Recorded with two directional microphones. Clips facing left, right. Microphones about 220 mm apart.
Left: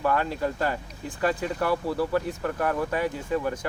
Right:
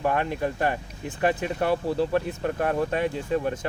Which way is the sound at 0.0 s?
20° right (ahead or behind).